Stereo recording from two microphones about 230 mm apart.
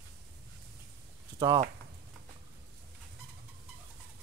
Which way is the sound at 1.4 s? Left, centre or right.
Centre.